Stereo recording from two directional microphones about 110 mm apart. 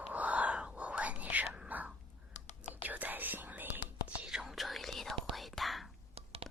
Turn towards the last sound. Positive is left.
turn(degrees=-65)  # may be behind; listen again after turning